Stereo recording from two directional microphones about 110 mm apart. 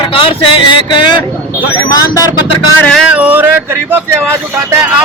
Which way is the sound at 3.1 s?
15° right (ahead or behind).